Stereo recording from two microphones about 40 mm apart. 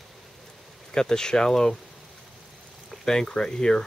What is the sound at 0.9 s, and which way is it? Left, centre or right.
Speech, centre.